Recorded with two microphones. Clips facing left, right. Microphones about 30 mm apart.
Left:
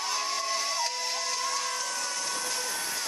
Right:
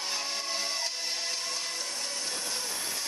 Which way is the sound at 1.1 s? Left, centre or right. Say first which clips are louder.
Left 3 dB; right.